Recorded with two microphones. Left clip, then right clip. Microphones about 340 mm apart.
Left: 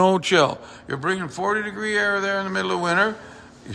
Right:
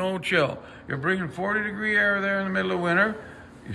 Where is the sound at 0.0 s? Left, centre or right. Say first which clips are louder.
Left 7 dB; centre.